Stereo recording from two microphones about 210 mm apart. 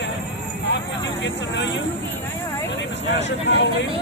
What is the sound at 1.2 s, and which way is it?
Speech, 55° left (ahead or behind).